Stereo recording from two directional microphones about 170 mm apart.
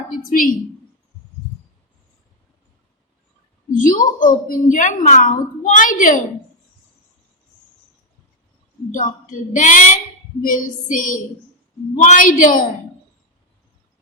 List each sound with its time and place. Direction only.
0.1 s a woman's voice: 55° left (ahead or behind)
3.7 s a woman's voice: 50° left (ahead or behind)
8.9 s a woman's voice: 50° left (ahead or behind)